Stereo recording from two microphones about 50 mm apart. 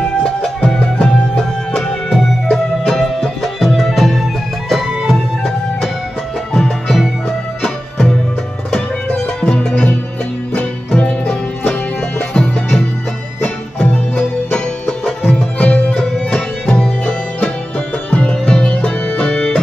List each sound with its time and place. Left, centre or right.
0.2 s music: centre
6.5 s music: centre